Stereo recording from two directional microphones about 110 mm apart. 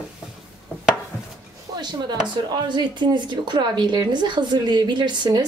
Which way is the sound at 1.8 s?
40° right (ahead or behind).